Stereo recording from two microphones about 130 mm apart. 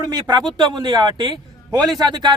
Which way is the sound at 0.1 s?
35° right (ahead or behind).